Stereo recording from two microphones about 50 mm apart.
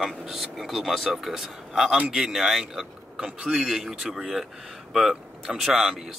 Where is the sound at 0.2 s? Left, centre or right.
Centre.